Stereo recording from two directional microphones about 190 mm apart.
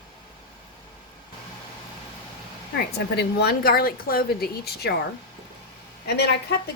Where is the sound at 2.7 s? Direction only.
60° left (ahead or behind).